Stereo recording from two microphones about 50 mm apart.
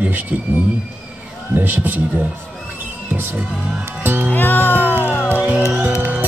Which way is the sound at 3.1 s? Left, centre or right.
Right.